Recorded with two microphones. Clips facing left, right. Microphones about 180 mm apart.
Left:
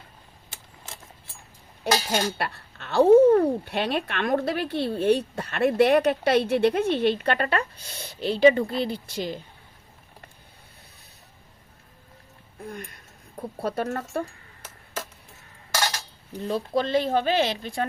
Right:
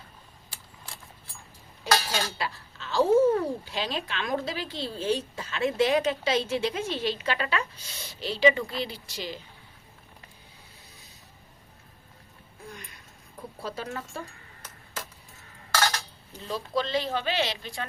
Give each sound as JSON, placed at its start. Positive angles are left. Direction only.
{"t": 1.9, "sound": "speech", "side_deg": 60}
{"t": 12.6, "sound": "a sound", "side_deg": 55}
{"t": 13.6, "sound": "speech", "side_deg": 60}
{"t": 16.4, "sound": "speech", "side_deg": 55}